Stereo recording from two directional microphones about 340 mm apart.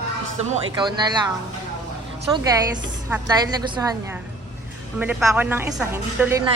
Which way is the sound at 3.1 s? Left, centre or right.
Centre.